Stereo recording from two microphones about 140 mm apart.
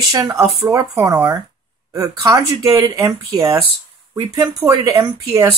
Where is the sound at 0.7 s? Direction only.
25° right (ahead or behind).